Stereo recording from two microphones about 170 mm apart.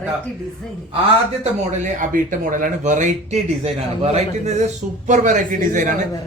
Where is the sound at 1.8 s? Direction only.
50° right (ahead or behind).